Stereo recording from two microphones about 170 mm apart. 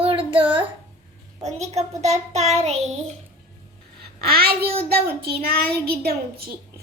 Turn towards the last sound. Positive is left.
turn(degrees=-65)  # may be behind; listen again after turning